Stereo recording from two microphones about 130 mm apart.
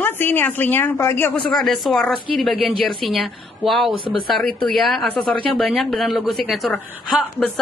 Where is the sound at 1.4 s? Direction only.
5° left (ahead or behind).